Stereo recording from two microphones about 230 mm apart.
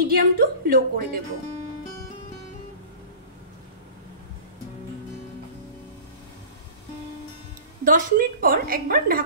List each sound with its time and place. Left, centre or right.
0.0 s a woman's voice: right
7.8 s a woman's voice: right